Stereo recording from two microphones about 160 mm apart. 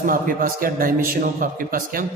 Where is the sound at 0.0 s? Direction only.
60° right (ahead or behind).